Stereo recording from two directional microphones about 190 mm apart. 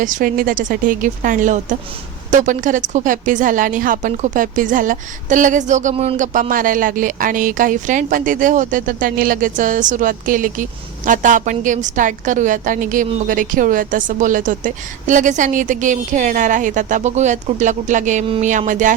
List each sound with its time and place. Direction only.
0.0 s a woman's voice: 45° right (ahead or behind)